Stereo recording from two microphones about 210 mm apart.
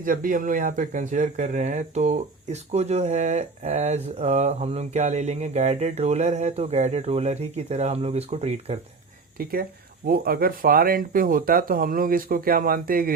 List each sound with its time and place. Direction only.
0.0 s speech: 40° right (ahead or behind)
9.4 s speech: 45° right (ahead or behind)